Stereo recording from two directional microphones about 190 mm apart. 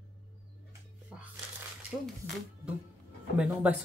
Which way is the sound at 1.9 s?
Centre (ahead or behind).